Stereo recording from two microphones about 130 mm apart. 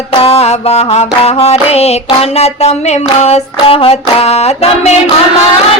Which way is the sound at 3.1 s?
55° left (ahead or behind).